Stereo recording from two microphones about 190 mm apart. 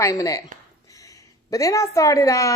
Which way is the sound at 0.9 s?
15° left (ahead or behind).